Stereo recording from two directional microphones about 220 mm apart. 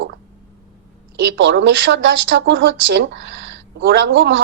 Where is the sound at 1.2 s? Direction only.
55° right (ahead or behind).